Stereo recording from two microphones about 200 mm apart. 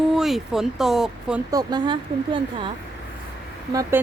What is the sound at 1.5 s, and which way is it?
Speech, 20° right (ahead or behind).